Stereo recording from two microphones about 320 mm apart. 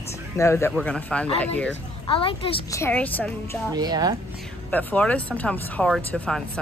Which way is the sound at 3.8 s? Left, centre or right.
Centre.